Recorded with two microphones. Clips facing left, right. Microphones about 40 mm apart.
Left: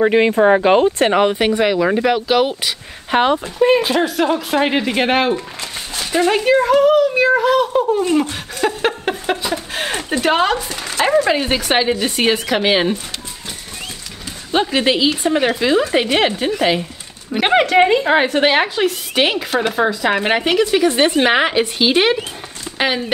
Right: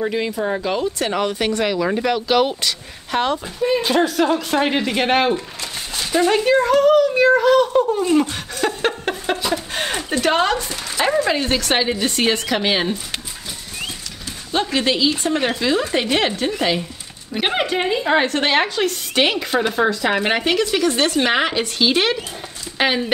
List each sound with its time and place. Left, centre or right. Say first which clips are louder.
0.0 s speech: left 9 dB; left; by 2.7 s centre
3.1 s speech: left 5 dB; left
3.8 s speech: left 1 dB; centre
14.5 s speech: left 3 dB; left
17.4 s speech: left 6 dB; left
18.0 s speech: left 3 dB; centre
22.8 s speech: even; centre